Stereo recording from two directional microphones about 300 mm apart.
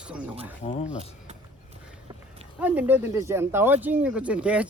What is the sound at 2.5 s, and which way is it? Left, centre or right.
Speech, centre.